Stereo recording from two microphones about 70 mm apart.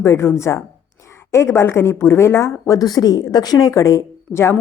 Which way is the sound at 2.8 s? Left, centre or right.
Left.